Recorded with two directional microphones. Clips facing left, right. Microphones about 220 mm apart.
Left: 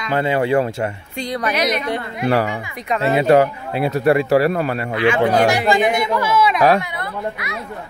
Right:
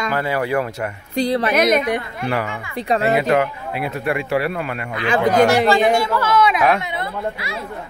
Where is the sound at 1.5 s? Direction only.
50° right (ahead or behind).